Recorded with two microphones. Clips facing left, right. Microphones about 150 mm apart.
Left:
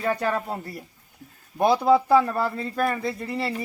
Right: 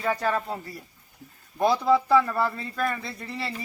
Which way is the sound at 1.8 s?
55° left (ahead or behind).